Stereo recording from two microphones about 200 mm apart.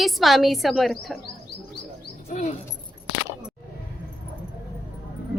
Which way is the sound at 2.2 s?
35° left (ahead or behind).